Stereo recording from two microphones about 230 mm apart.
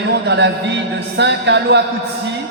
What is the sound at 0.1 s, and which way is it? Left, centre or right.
Speech, right.